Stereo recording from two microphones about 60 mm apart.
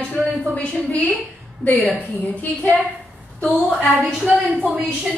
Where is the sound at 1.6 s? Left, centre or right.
Left.